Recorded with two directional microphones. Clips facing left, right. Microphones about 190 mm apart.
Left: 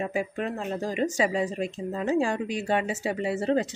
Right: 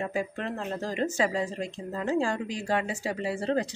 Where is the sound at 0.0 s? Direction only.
15° left (ahead or behind).